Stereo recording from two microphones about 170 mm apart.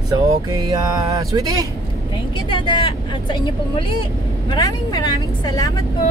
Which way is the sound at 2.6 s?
30° left (ahead or behind).